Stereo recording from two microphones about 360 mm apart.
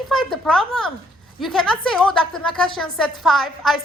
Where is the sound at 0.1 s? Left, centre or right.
Centre.